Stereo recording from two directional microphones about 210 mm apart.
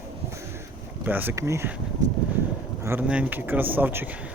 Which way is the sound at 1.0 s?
10° right (ahead or behind).